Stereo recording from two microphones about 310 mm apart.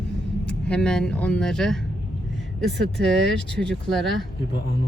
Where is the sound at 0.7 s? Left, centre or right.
Centre.